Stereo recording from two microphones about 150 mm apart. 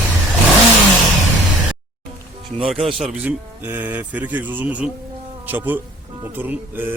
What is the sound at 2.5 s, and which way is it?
Speech, 5° right (ahead or behind).